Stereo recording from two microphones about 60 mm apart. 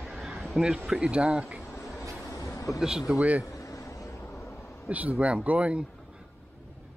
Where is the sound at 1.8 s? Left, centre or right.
Left.